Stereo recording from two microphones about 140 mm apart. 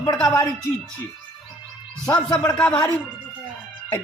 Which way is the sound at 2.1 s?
30° left (ahead or behind).